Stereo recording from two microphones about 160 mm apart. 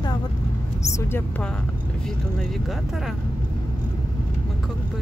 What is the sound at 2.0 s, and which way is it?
Speech, centre (ahead or behind).